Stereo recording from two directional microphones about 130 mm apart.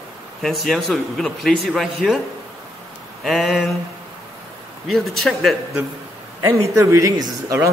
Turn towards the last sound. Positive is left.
turn(degrees=-25)  # may be behind; listen again after turning